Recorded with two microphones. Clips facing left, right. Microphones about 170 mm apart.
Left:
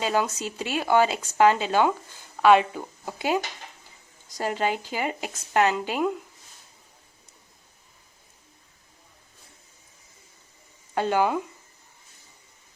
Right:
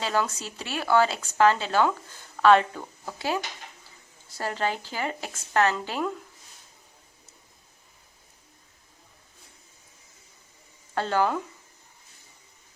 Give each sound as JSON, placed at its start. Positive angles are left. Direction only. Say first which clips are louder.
{"t": 0.0, "sound": "speech", "louder": "left 2 dB", "side_deg": 15}
{"t": 10.9, "sound": "speech", "louder": "left 2 dB", "side_deg": 15}